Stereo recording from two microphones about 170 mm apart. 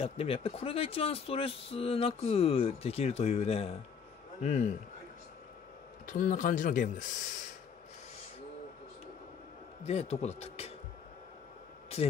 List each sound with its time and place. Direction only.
0.0 s speech: 35° left (ahead or behind)
6.0 s speech: 50° left (ahead or behind)
9.8 s speech: 40° left (ahead or behind)